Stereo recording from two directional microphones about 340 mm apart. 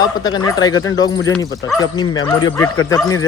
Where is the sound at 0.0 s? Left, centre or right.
Centre.